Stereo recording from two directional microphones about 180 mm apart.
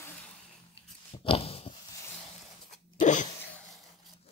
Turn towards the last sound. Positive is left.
turn(degrees=45)  # may be behind; listen again after turning